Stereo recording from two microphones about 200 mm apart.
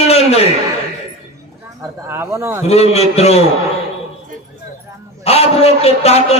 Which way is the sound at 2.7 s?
30° left (ahead or behind).